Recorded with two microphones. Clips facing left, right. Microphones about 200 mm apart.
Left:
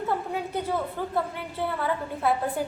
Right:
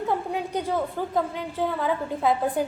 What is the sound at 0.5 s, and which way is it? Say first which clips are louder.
A woman's voice: right 3 dB; 15° right (ahead or behind).